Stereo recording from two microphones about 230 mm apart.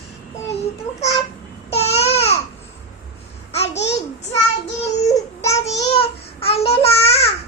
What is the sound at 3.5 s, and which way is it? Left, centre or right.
Babbling, left.